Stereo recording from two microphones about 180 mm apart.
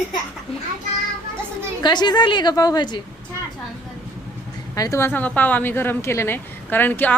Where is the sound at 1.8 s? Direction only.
25° left (ahead or behind).